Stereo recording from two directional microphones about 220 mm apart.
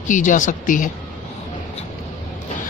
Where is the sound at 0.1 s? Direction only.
35° left (ahead or behind).